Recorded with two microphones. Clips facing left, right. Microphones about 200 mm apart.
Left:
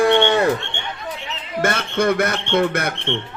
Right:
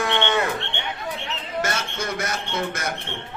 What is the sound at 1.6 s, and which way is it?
A man's voice, 55° left (ahead or behind).